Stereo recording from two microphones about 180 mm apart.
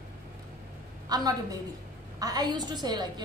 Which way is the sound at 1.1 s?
20° right (ahead or behind).